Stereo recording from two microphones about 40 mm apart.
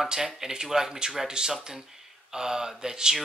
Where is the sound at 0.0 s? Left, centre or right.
Centre.